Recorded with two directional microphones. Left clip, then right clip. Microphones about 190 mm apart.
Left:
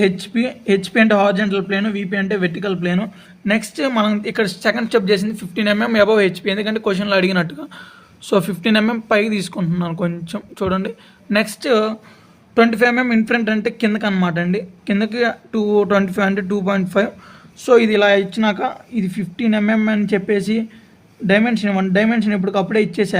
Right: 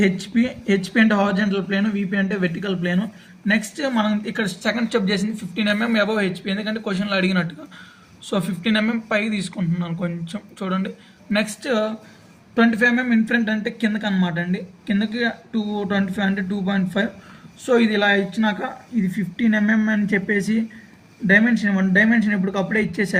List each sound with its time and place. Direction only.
0.0 s speech: 45° left (ahead or behind)